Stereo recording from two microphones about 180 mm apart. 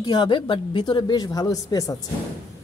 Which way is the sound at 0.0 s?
25° left (ahead or behind).